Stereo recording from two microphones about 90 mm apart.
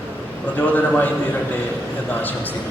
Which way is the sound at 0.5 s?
20° left (ahead or behind).